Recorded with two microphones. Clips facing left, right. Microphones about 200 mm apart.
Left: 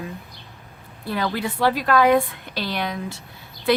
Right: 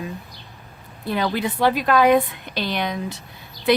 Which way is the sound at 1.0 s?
20° right (ahead or behind).